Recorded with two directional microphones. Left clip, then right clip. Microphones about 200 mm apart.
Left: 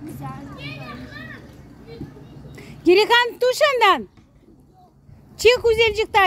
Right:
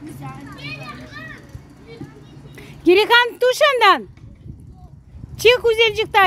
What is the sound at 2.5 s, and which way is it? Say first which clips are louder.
Speech: right 1 dB; 15° right (ahead or behind).